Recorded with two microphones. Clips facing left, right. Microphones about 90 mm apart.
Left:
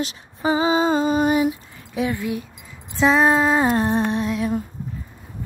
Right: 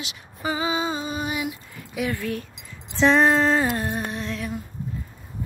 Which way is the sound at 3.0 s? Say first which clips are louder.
Left 1 dB; 10° left (ahead or behind).